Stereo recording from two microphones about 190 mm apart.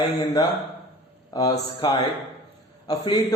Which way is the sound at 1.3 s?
20° left (ahead or behind).